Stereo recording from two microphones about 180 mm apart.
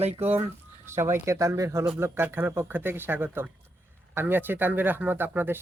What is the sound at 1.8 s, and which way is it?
Speech, 5° right (ahead or behind).